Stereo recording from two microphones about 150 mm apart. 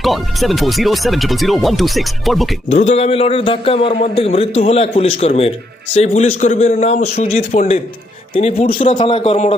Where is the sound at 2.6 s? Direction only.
50° left (ahead or behind).